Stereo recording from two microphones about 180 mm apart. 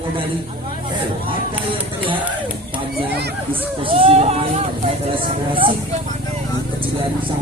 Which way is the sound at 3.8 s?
30° right (ahead or behind).